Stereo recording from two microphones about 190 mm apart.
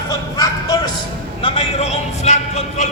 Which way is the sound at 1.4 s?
30° left (ahead or behind).